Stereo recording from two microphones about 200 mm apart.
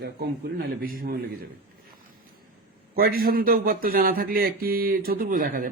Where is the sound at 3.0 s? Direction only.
50° right (ahead or behind).